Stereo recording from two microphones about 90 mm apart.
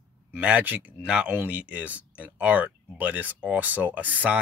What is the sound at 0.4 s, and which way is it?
Speech, 15° right (ahead or behind).